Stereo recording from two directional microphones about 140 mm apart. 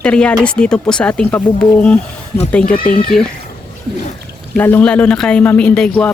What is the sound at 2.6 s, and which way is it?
Speech, 90° left.